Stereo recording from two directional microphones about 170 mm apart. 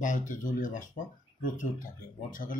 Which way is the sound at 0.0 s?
50° left (ahead or behind).